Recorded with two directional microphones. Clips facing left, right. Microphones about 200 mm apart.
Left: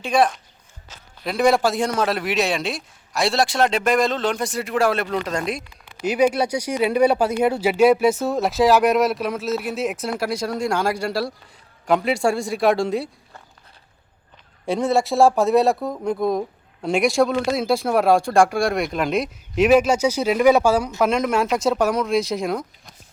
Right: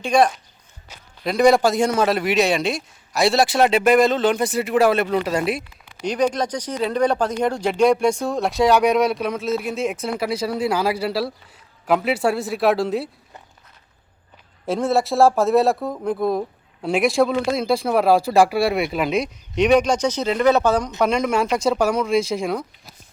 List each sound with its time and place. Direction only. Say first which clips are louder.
0.0 s speech: right 2 dB; 5° left (ahead or behind)
6.0 s speech: left 2 dB; 5° left (ahead or behind)
14.7 s speech: even; centre (ahead or behind)